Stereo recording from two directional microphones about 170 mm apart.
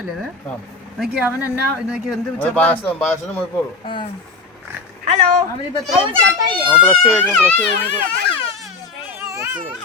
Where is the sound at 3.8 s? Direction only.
30° left (ahead or behind).